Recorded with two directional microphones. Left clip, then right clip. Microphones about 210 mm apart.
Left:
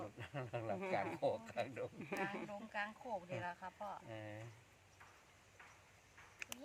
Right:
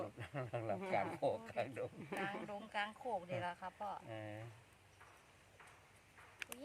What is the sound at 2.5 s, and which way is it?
Speech, 55° right (ahead or behind).